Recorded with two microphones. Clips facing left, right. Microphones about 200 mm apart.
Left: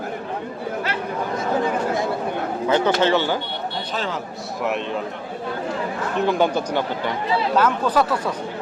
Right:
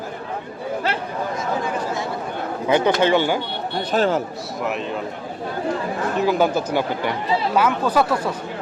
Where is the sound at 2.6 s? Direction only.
15° right (ahead or behind).